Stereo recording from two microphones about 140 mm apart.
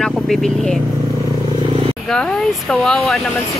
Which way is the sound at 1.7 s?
40° right (ahead or behind).